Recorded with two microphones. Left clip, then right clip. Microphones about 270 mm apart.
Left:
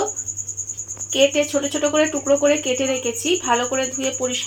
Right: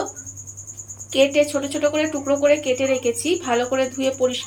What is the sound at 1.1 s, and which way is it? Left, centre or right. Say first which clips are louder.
Speech: even; left.